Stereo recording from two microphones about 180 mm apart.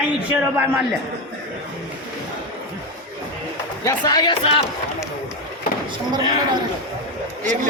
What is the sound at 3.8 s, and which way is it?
Speech, 20° left (ahead or behind).